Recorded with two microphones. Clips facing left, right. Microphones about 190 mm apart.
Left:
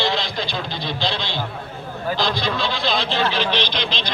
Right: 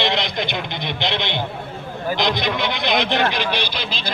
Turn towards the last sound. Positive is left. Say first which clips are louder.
# left 1 dB
turn(degrees=-5)  # may be behind; listen again after turning